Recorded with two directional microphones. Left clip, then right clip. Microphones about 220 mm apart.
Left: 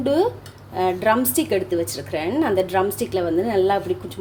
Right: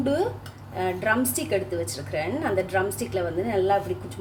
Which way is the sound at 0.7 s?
35° left (ahead or behind).